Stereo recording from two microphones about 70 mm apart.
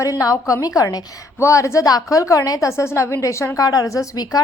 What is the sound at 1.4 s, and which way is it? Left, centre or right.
Speech, left.